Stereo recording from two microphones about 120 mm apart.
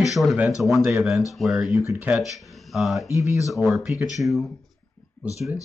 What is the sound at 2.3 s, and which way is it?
Speech, centre (ahead or behind).